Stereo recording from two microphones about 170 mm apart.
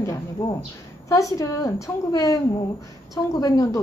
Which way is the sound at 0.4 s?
20° left (ahead or behind).